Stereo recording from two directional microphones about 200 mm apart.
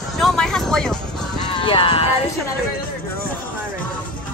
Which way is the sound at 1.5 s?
25° left (ahead or behind).